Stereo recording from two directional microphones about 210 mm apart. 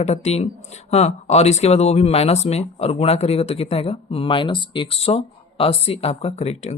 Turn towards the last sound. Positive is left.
turn(degrees=30)  # may be behind; listen again after turning